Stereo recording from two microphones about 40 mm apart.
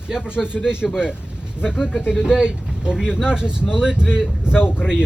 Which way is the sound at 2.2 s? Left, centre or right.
Centre.